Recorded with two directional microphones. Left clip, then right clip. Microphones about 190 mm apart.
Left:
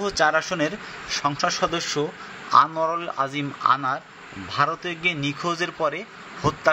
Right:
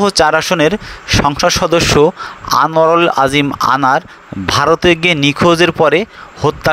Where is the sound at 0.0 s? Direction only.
50° right (ahead or behind).